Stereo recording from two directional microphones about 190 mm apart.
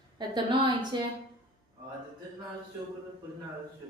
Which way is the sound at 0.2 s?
25° right (ahead or behind).